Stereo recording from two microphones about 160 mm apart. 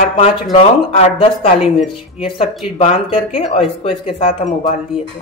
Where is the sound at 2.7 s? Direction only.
40° left (ahead or behind).